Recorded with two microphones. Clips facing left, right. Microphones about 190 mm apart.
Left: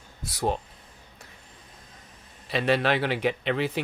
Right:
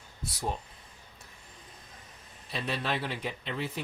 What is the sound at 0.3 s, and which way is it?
Speech, 80° left.